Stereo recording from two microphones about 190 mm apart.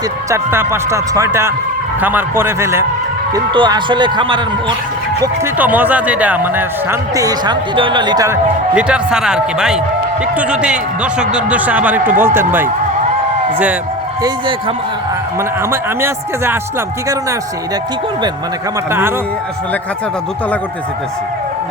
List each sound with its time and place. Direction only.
0.3 s speech: 15° right (ahead or behind)
5.2 s speech: 10° right (ahead or behind)
7.2 s speech: 20° right (ahead or behind)
8.7 s speech: 5° right (ahead or behind)
14.2 s speech: 20° right (ahead or behind)
15.7 s speech: 10° right (ahead or behind)
18.9 s speech: 10° right (ahead or behind)